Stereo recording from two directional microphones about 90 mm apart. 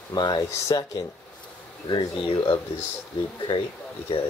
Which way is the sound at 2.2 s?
75° left (ahead or behind).